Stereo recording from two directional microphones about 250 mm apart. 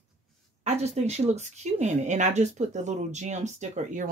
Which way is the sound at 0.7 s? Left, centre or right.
Right.